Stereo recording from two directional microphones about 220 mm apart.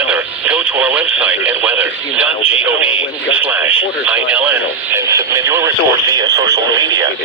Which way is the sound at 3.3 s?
5° right (ahead or behind).